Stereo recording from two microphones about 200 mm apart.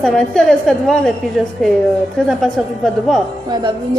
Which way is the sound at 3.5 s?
20° right (ahead or behind).